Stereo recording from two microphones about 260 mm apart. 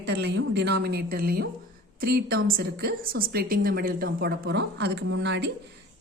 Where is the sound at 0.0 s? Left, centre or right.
Right.